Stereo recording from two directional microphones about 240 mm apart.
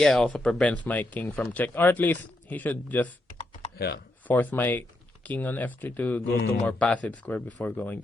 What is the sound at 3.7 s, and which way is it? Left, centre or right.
Speech, left.